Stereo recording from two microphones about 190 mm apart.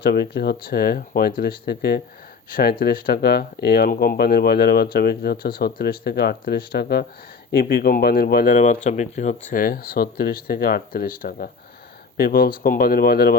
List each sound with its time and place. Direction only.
0.0 s speech: 55° left (ahead or behind)
8.5 s speech: 40° left (ahead or behind)